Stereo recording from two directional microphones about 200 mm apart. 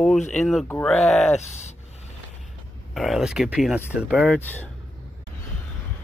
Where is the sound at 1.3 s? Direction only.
35° left (ahead or behind).